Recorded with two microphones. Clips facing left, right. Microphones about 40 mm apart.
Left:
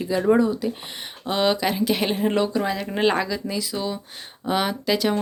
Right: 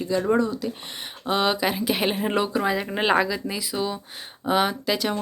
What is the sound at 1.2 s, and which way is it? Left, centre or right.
A woman's voice, centre.